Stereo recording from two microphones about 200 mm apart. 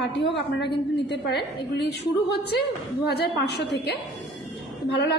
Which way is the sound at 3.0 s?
55° left (ahead or behind).